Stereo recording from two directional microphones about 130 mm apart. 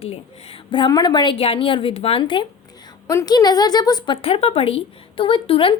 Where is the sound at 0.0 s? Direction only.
50° left (ahead or behind).